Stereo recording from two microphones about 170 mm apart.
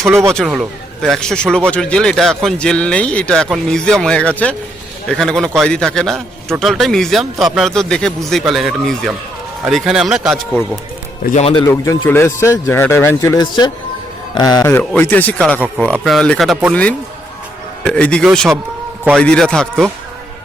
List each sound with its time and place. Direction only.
0.1 s speech: 15° right (ahead or behind)
0.3 s a man's voice: centre (ahead or behind)
11.3 s a man's voice: 30° left (ahead or behind)
11.7 s a man's voice: 15° left (ahead or behind)
14.7 s a man's voice: 10° left (ahead or behind)
17.8 s a man's voice: 5° left (ahead or behind)